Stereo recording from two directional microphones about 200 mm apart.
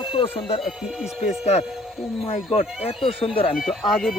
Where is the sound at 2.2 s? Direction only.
25° left (ahead or behind).